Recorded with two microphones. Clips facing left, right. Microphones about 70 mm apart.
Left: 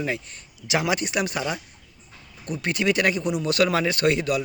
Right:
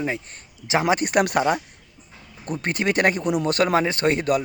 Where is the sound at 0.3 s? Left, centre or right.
Right.